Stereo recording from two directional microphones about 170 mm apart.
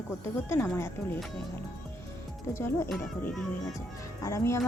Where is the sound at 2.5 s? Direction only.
15° left (ahead or behind).